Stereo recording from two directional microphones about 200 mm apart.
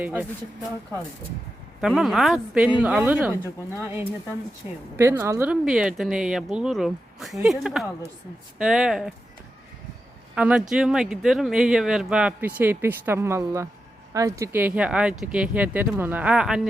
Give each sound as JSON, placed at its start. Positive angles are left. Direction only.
{"t": 0.0, "sound": "speech", "side_deg": -10}
{"t": 1.8, "sound": "speech", "side_deg": 0}
{"t": 5.6, "sound": "speech", "side_deg": 0}
{"t": 10.3, "sound": "speech", "side_deg": -5}